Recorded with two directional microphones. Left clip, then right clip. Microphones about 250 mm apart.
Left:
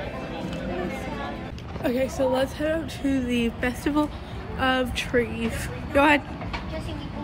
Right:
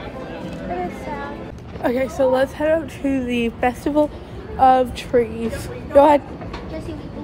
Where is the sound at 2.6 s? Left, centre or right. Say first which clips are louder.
Right 7 dB; right.